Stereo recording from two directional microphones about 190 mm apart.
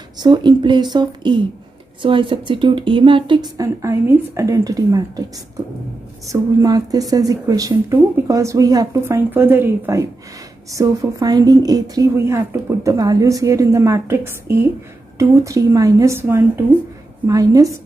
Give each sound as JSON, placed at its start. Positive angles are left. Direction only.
{"t": 0.2, "sound": "a woman's voice", "side_deg": -25}
{"t": 6.3, "sound": "a woman's voice", "side_deg": -20}